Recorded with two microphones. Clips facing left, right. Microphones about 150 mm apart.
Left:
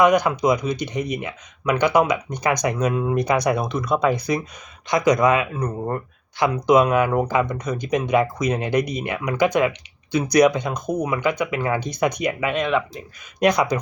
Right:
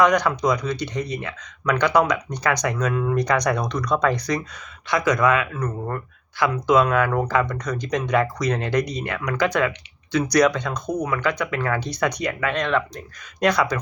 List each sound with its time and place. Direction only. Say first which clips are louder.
0.0 s speech: left 2 dB; 10° left (ahead or behind)
2.9 s speech: left 1 dB; 25° left (ahead or behind)
3.2 s speech: left 1 dB; 10° left (ahead or behind); by 6.0 s 30° left (ahead or behind)
6.4 s speech: left 2 dB; 15° left (ahead or behind)